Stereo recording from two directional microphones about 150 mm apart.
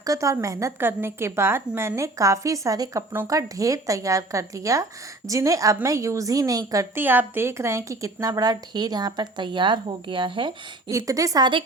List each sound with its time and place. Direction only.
0.0 s a woman's voice: 20° right (ahead or behind)
10.9 s a woman's voice: 20° right (ahead or behind)